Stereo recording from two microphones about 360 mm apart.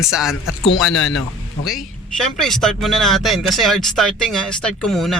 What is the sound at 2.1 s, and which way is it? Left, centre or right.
Speech, centre.